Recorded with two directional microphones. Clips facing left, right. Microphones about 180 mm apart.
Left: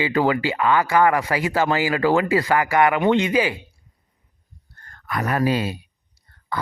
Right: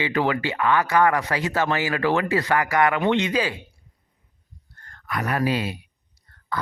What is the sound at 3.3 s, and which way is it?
Speech, 15° left (ahead or behind).